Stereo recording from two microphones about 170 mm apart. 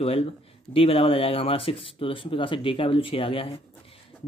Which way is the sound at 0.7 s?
35° left (ahead or behind).